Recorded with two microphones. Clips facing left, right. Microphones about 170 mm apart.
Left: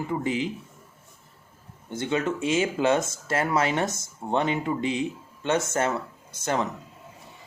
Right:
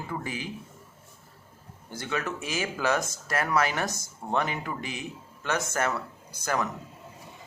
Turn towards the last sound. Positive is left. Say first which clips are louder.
# left 2 dB
turn(degrees=25)  # may be behind; listen again after turning